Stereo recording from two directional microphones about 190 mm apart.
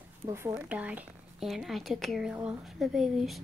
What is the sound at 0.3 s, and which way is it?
Speech, 15° right (ahead or behind).